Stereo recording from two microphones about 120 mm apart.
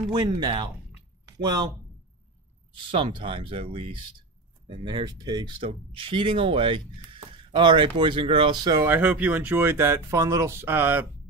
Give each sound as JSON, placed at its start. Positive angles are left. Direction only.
{"t": 0.1, "sound": "speech", "side_deg": -40}
{"t": 2.7, "sound": "speech", "side_deg": -45}
{"t": 8.8, "sound": "speech", "side_deg": -15}